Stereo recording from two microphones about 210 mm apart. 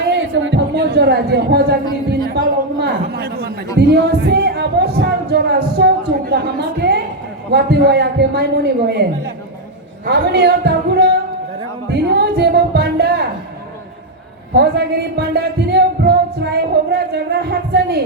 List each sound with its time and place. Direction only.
0.1 s a sound: 60° right (ahead or behind)
7.5 s music: 55° right (ahead or behind)
14.5 s music: 50° right (ahead or behind)